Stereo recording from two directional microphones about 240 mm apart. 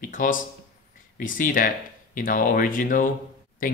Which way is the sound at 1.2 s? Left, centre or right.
Left.